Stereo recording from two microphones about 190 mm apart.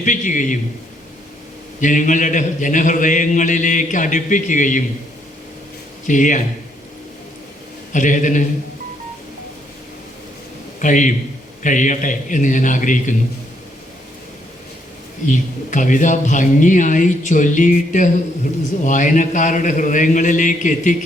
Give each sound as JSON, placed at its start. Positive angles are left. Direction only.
{"t": 0.0, "sound": "a man's voice", "side_deg": 40}
{"t": 1.8, "sound": "a man's voice", "side_deg": 40}
{"t": 6.1, "sound": "a man's voice", "side_deg": 40}
{"t": 7.9, "sound": "a man's voice", "side_deg": 40}
{"t": 10.8, "sound": "a man's voice", "side_deg": 40}
{"t": 15.3, "sound": "a man's voice", "side_deg": 40}